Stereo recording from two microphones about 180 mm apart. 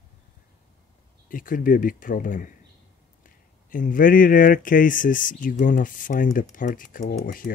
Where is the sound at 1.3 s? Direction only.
50° left (ahead or behind).